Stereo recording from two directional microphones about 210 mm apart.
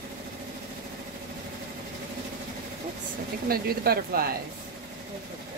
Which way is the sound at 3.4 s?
45° right (ahead or behind).